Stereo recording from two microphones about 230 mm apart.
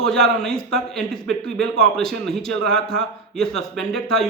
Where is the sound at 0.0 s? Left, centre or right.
Centre.